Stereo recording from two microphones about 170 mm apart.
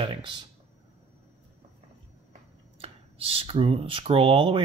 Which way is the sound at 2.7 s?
35° right (ahead or behind).